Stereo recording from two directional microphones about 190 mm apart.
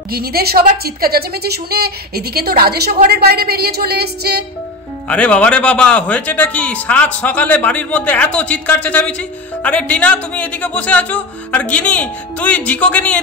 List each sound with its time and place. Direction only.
0.1 s a woman's voice: 55° right (ahead or behind)
5.0 s speech: 5° left (ahead or behind)